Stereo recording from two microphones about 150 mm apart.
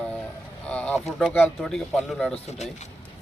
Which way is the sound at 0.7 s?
10° left (ahead or behind).